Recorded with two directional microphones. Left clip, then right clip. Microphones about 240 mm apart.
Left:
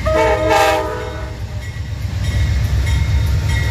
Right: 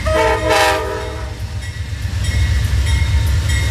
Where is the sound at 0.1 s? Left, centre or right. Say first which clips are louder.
Left 1 dB; centre.